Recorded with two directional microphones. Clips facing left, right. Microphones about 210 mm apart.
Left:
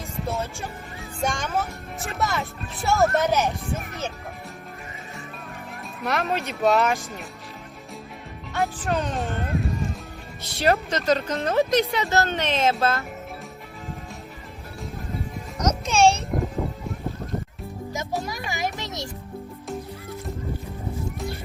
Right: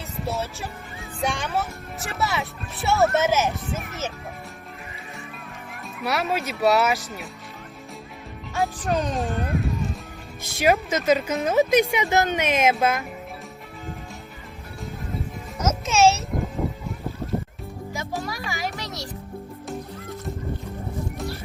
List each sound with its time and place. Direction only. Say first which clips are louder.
1.2 s speech: even; centre (ahead or behind)
6.0 s speech: right 1 dB; 5° right (ahead or behind)
8.8 s speech: right 1 dB; 15° right (ahead or behind)
9.1 s speech: right 1 dB; centre (ahead or behind)
10.4 s speech: right 1 dB; 10° right (ahead or behind)
15.5 s music: even; 5° right (ahead or behind)
18.2 s music: left 1 dB; 20° left (ahead or behind)